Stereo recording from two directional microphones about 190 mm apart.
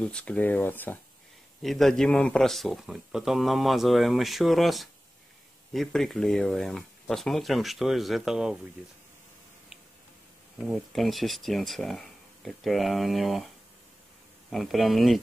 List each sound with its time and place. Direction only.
0.0 s a man's voice: 5° left (ahead or behind)
10.6 s a man's voice: centre (ahead or behind)
14.5 s a man's voice: centre (ahead or behind)